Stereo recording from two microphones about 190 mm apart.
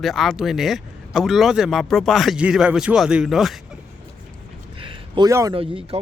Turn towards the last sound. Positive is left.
turn(degrees=-30)  # may be behind; listen again after turning